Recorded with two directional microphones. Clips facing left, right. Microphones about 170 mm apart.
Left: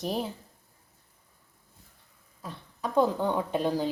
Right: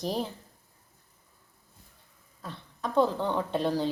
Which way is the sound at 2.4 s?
10° left (ahead or behind).